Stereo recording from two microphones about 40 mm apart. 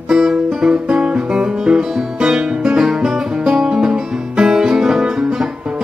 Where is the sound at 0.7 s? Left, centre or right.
Right.